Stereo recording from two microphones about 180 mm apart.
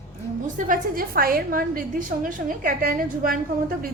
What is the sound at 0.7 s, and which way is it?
A woman's voice, 55° right (ahead or behind).